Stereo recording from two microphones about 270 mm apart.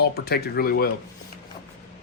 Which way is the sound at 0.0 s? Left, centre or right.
Left.